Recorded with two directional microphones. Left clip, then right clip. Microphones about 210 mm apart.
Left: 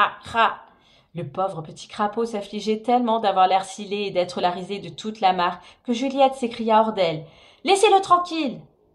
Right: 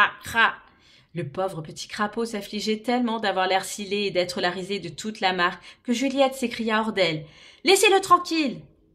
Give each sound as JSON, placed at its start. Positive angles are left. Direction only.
{"t": 0.2, "sound": "speech", "side_deg": -20}